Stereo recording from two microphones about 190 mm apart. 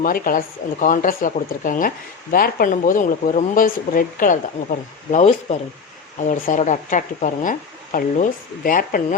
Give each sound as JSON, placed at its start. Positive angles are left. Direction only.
{"t": 0.0, "sound": "speech", "side_deg": 50}